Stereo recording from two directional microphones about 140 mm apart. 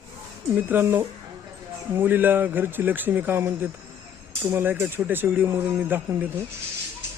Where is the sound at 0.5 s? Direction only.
15° right (ahead or behind).